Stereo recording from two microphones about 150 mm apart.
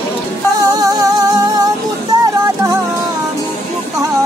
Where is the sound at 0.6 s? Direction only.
25° right (ahead or behind).